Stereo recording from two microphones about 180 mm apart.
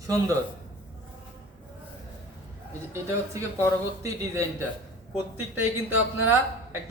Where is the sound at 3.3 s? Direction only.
15° right (ahead or behind).